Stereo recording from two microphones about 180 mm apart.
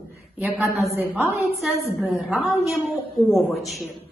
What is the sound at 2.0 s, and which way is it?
A woman's voice, 5° right (ahead or behind).